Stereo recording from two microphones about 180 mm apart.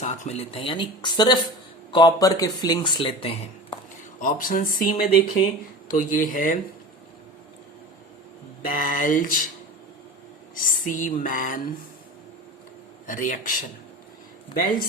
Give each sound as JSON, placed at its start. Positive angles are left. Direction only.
{"t": 0.0, "sound": "speech", "side_deg": 40}
{"t": 4.2, "sound": "speech", "side_deg": 50}
{"t": 8.6, "sound": "speech", "side_deg": 50}
{"t": 10.5, "sound": "speech", "side_deg": 50}
{"t": 13.1, "sound": "speech", "side_deg": 45}